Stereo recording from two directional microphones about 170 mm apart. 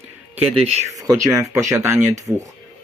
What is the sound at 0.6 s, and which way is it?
Speech, 40° right (ahead or behind).